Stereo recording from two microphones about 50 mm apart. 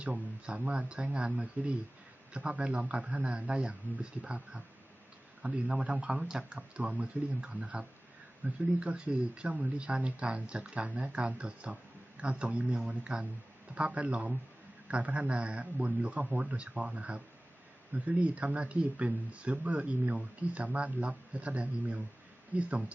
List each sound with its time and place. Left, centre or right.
0.0 s speech: right
6.6 s speech: right